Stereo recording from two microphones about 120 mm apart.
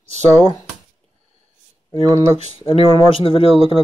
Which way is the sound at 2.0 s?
25° right (ahead or behind).